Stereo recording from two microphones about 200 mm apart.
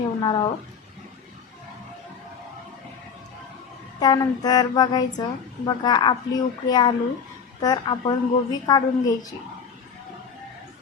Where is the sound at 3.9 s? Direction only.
20° left (ahead or behind).